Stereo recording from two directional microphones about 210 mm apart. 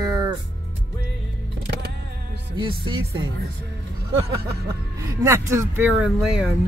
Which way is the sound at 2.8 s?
20° right (ahead or behind).